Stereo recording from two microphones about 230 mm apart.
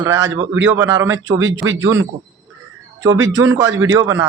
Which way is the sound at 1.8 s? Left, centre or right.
Centre.